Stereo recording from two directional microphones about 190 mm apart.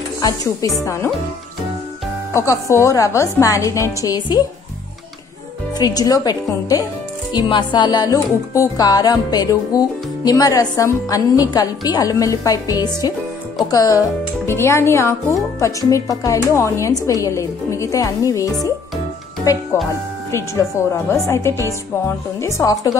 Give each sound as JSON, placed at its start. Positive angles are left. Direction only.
{"t": 0.2, "sound": "speech", "side_deg": 20}
{"t": 2.3, "sound": "a woman's voice", "side_deg": 15}
{"t": 5.8, "sound": "a woman's voice", "side_deg": 20}
{"t": 20.2, "sound": "a woman's voice", "side_deg": 15}